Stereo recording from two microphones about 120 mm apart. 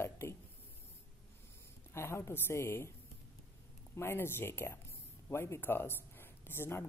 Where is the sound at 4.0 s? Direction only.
20° left (ahead or behind).